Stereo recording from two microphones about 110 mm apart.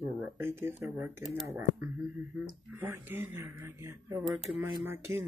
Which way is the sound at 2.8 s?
20° right (ahead or behind).